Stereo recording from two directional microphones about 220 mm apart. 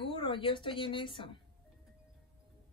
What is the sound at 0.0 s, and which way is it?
A woman's voice, 20° left (ahead or behind).